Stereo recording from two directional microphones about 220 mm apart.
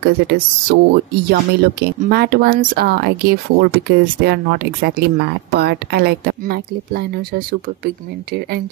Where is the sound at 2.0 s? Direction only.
45° right (ahead or behind).